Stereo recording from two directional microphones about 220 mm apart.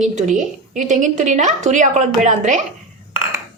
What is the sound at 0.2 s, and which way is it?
A woman's voice, 35° right (ahead or behind).